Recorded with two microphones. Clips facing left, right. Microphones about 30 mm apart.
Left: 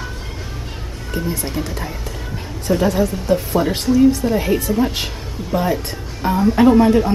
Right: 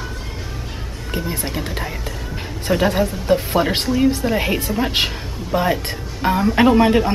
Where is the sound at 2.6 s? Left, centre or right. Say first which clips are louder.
Left 1 dB; right.